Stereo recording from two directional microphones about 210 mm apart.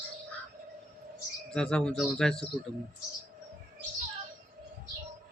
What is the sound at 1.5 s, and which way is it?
Speech, 5° left (ahead or behind).